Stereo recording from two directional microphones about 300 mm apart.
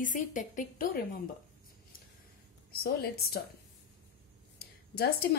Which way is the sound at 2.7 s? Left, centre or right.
Left.